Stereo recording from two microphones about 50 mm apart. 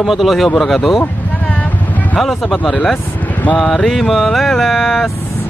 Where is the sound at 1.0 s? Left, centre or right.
Left.